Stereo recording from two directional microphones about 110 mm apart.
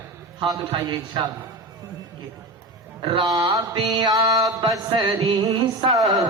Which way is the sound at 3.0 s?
50° right (ahead or behind).